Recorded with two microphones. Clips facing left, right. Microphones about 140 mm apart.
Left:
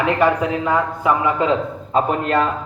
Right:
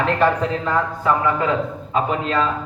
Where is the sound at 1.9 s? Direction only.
50° left (ahead or behind).